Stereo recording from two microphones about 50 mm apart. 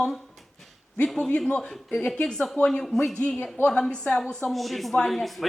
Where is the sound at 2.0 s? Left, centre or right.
Left.